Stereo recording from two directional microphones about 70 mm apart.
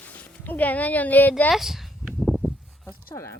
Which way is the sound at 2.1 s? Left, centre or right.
Centre.